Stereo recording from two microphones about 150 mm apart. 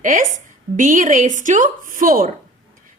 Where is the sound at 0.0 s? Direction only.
60° right (ahead or behind).